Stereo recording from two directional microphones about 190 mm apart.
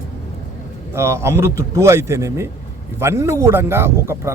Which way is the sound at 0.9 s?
15° right (ahead or behind).